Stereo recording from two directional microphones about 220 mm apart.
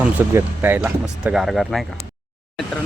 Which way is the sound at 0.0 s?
10° right (ahead or behind).